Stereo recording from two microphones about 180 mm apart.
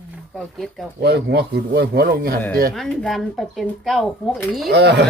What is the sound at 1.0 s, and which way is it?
Speech, 65° right (ahead or behind).